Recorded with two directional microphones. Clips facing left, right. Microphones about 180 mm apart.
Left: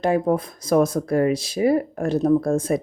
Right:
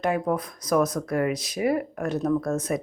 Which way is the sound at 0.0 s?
30° left (ahead or behind).